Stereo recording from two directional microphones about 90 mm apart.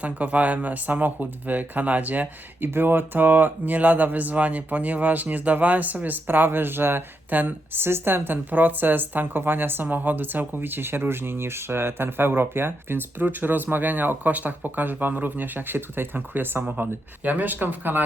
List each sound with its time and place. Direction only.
0.0 s speech: 15° right (ahead or behind)